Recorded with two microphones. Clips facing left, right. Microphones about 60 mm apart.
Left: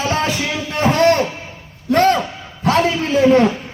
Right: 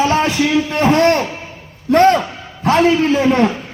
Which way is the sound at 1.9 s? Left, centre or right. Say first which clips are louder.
Right 3 dB; right.